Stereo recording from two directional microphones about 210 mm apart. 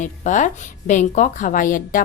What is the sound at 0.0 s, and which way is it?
A woman's voice, 35° left (ahead or behind).